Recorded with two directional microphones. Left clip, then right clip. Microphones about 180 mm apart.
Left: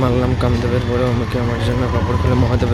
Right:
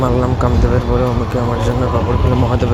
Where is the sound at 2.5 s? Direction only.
Centre (ahead or behind).